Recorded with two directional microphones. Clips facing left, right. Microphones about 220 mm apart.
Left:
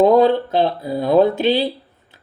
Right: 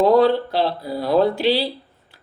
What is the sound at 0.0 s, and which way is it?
Speech, 20° left (ahead or behind).